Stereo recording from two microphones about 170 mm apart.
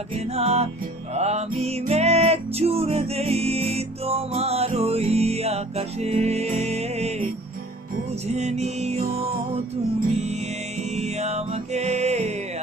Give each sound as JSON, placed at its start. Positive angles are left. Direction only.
{"t": 0.1, "sound": "music", "side_deg": -35}
{"t": 8.3, "sound": "music", "side_deg": -40}
{"t": 10.8, "sound": "music", "side_deg": -40}